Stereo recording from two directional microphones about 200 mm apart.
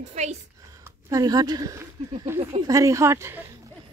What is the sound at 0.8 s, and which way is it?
Speech, 15° right (ahead or behind).